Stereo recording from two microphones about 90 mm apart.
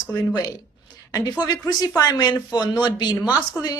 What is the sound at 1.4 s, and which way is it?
A woman's voice, 45° left (ahead or behind).